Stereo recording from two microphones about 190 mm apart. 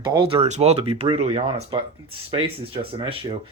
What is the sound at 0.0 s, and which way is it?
Speech, 25° right (ahead or behind).